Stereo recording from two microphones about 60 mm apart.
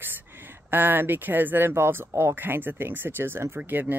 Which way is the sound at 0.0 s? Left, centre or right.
Right.